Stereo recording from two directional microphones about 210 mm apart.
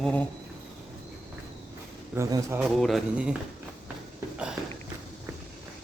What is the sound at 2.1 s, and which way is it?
Speech, 15° right (ahead or behind).